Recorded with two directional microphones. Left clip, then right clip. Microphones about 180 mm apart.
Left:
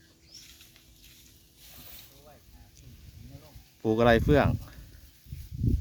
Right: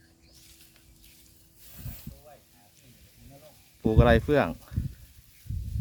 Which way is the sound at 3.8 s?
5° left (ahead or behind).